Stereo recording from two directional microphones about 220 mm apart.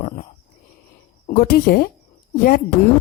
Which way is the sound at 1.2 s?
40° left (ahead or behind).